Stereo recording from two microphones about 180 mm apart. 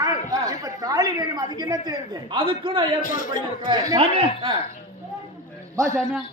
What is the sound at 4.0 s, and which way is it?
Speech, 35° right (ahead or behind).